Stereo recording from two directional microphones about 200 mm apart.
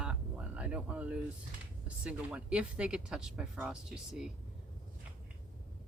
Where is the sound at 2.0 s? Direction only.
5° right (ahead or behind).